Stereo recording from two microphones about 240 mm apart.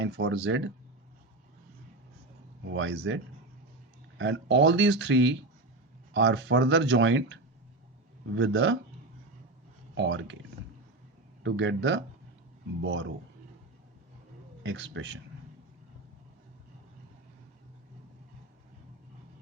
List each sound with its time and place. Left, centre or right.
0.0 s speech: right
2.7 s speech: right
4.2 s speech: right
8.4 s speech: right
9.9 s speech: right
11.4 s speech: right
14.6 s speech: right